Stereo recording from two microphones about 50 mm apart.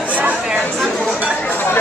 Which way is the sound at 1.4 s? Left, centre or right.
Left.